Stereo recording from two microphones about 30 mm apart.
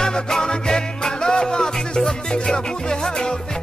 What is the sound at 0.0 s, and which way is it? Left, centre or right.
Music, left.